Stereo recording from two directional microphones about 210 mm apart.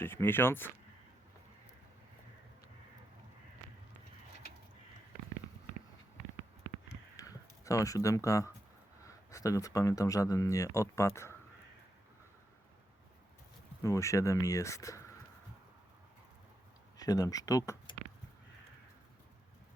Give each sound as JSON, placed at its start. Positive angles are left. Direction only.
{"t": 0.0, "sound": "speech", "side_deg": 10}
{"t": 7.2, "sound": "a sound", "side_deg": 15}
{"t": 9.0, "sound": "speech", "side_deg": 15}
{"t": 13.8, "sound": "speech", "side_deg": 15}
{"t": 17.0, "sound": "speech", "side_deg": 15}